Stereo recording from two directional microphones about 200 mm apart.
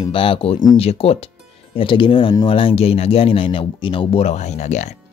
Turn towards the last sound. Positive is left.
turn(degrees=35)  # may be behind; listen again after turning